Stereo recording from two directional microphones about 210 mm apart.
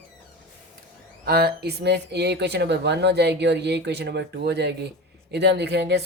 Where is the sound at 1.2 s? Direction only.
50° right (ahead or behind).